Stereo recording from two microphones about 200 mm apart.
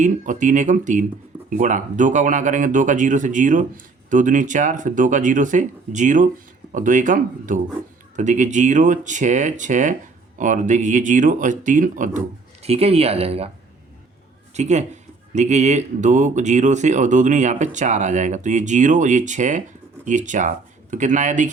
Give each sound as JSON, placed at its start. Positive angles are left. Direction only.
{"t": 0.0, "sound": "speech", "side_deg": -40}
{"t": 14.5, "sound": "speech", "side_deg": -35}